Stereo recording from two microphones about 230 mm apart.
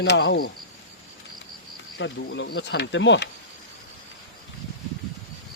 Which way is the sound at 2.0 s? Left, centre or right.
Left.